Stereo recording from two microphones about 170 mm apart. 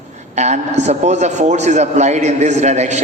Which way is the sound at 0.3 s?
40° right (ahead or behind).